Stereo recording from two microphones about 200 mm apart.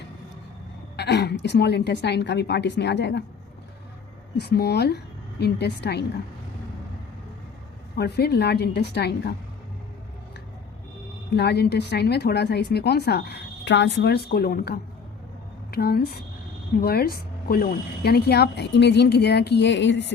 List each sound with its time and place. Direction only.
0.9 s a woman's voice: 55° left (ahead or behind)
4.4 s a woman's voice: 55° left (ahead or behind)
7.9 s a woman's voice: 55° left (ahead or behind)
11.3 s a woman's voice: 55° left (ahead or behind)